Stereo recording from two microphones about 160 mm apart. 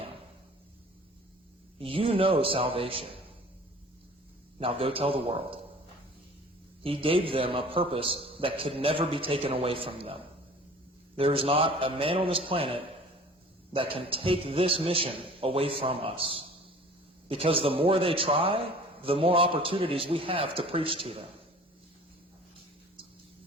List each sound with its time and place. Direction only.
1.8 s a man's voice: 35° right (ahead or behind)
4.6 s a man's voice: 35° right (ahead or behind)
6.8 s a man's voice: 35° right (ahead or behind)